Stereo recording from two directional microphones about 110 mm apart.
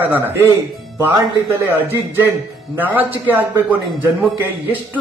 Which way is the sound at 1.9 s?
20° right (ahead or behind).